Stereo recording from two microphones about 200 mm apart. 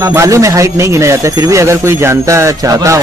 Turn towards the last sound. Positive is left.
turn(degrees=-15)  # may be behind; listen again after turning